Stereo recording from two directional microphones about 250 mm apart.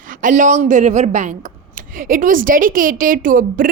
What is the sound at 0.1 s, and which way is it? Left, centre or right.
A woman's voice, right.